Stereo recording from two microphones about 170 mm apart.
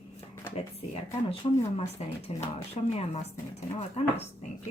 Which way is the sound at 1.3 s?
35° left (ahead or behind).